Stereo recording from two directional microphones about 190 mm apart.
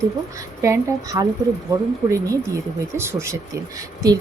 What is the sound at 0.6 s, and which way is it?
A woman's voice, 15° right (ahead or behind).